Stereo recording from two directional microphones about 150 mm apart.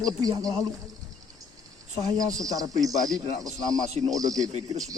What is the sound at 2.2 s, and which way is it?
Speech, 25° right (ahead or behind).